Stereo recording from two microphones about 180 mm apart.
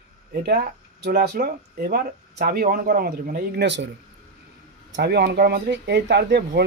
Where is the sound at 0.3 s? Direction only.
60° right (ahead or behind); by 3.9 s 75° right (ahead or behind).